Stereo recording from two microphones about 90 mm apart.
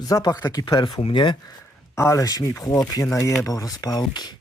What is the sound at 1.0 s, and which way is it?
Speech, 65° left (ahead or behind).